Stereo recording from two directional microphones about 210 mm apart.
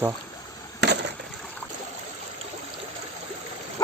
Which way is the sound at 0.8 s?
55° right (ahead or behind).